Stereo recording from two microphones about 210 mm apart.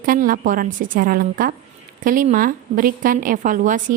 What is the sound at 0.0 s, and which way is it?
A woman's voice, 40° right (ahead or behind).